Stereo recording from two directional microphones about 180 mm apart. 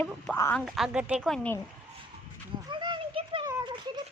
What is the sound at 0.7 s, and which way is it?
Speech, 5° right (ahead or behind).